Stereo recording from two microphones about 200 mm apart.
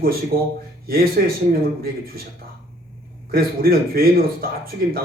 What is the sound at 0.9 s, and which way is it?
Speech, 50° right (ahead or behind).